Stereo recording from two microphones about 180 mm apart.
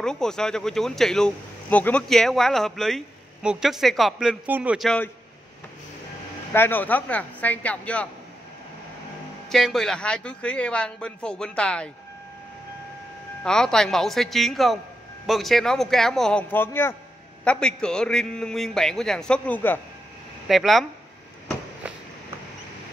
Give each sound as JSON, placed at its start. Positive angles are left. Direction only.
{"t": 0.0, "sound": "speech", "side_deg": 5}
{"t": 4.8, "sound": "speech", "side_deg": 5}
{"t": 6.5, "sound": "speech", "side_deg": 10}
{"t": 9.5, "sound": "speech", "side_deg": 0}
{"t": 13.4, "sound": "speech", "side_deg": 5}
{"t": 20.4, "sound": "speech", "side_deg": 0}